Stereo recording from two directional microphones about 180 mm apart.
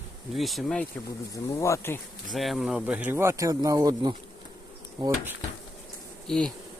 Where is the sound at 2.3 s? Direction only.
Centre (ahead or behind); by 4.1 s 20° right (ahead or behind).